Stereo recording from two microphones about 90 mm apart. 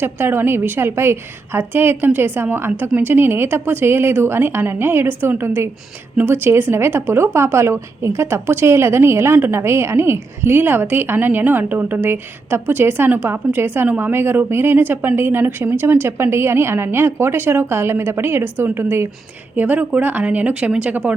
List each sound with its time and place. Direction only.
0.0 s speech: 25° right (ahead or behind)